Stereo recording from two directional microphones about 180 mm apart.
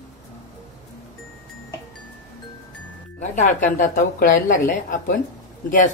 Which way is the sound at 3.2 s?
45° left (ahead or behind).